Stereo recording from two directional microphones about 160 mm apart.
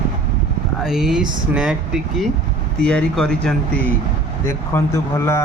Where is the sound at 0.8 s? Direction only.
5° right (ahead or behind).